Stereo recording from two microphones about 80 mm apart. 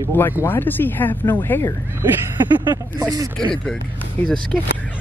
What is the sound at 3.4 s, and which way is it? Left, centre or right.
Speech, centre.